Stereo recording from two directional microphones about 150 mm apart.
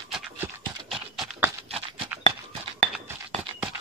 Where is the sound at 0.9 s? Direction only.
Centre (ahead or behind).